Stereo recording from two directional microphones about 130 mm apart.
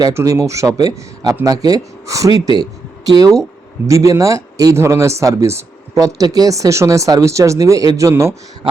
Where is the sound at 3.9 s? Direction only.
25° right (ahead or behind).